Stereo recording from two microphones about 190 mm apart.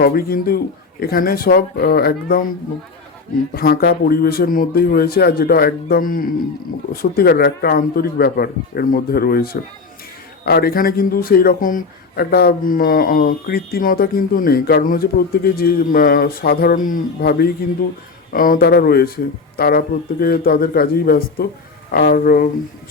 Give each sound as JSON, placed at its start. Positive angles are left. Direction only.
{"t": 0.0, "sound": "a man's voice", "side_deg": 50}
{"t": 3.5, "sound": "a man's voice", "side_deg": 55}